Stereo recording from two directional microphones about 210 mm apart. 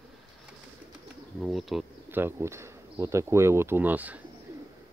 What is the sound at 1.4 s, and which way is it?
Speech, centre (ahead or behind).